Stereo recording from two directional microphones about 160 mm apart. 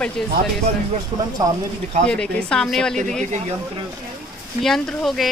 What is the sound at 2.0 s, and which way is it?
Speech, 5° left (ahead or behind).